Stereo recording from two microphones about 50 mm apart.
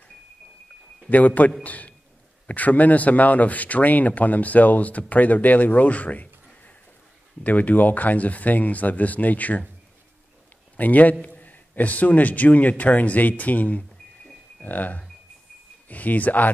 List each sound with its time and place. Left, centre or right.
1.0 s a man's voice: left
10.8 s speech: left